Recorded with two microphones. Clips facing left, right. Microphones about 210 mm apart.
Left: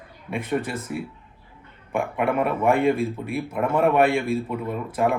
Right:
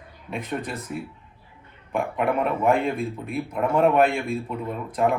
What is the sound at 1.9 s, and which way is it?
A man's voice, 10° left (ahead or behind).